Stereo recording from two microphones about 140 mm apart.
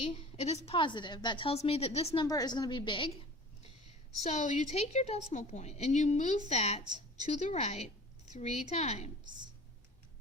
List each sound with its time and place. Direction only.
0.0 s a woman's voice: 50° left (ahead or behind)
2.2 s a woman's voice: 25° left (ahead or behind)
4.2 s a woman's voice: 60° left (ahead or behind)